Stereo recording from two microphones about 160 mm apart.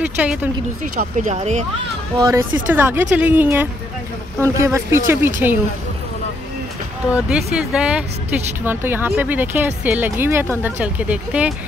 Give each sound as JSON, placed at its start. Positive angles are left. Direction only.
{"t": 0.2, "sound": "speech", "side_deg": -10}
{"t": 1.4, "sound": "speech", "side_deg": -45}
{"t": 2.1, "sound": "speech", "side_deg": -25}
{"t": 2.7, "sound": "speech", "side_deg": -15}
{"t": 7.1, "sound": "speech", "side_deg": -5}